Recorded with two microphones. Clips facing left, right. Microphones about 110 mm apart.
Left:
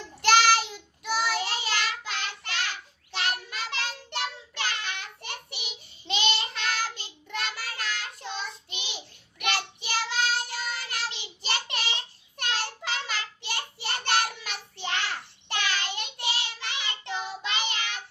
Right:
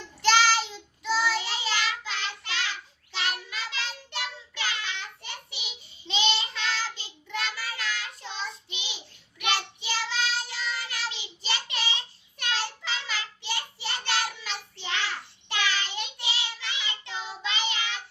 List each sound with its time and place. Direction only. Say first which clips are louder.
0.2 s child singing: left 1 dB; 55° left (ahead or behind)